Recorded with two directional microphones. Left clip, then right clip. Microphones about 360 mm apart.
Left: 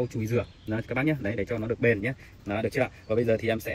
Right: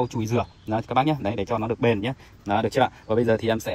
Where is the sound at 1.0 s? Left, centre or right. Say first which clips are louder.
Right 4 dB; centre.